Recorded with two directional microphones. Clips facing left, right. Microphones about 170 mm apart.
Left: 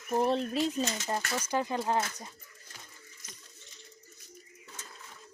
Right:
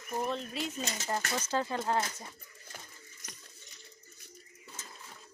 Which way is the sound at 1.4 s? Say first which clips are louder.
Left 2 dB; 15° left (ahead or behind).